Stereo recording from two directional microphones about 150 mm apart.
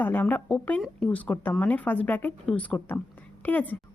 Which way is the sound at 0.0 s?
15° left (ahead or behind).